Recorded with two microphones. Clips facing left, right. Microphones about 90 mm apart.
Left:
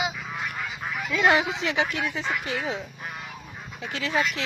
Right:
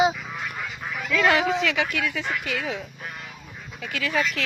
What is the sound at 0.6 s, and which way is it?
Duck, 5° left (ahead or behind).